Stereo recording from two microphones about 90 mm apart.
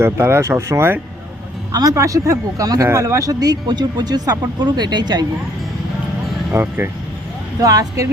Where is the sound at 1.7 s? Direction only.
45° right (ahead or behind).